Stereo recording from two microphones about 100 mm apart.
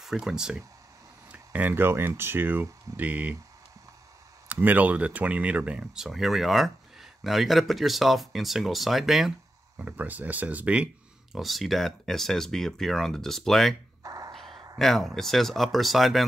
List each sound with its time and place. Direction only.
0.0 s speech: 5° right (ahead or behind)
4.5 s speech: 15° right (ahead or behind)
9.8 s speech: 15° right (ahead or behind)
11.3 s speech: centre (ahead or behind)
14.0 s music: 35° right (ahead or behind)
14.3 s a sound: centre (ahead or behind)
14.8 s speech: centre (ahead or behind)